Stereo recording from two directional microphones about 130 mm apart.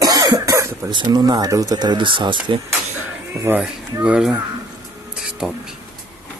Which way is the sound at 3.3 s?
20° right (ahead or behind).